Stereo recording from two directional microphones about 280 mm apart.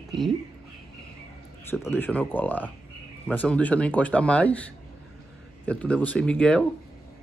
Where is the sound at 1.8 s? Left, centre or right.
Centre.